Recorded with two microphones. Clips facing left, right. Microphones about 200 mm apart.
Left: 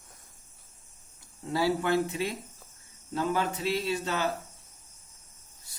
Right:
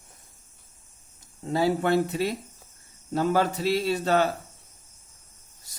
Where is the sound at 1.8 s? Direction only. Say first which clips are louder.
Right 4 dB; 35° right (ahead or behind).